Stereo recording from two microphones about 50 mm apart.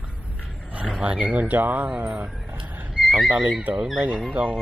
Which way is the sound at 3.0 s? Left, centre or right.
Centre.